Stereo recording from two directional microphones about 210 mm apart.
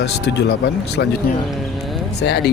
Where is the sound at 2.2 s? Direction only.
50° left (ahead or behind).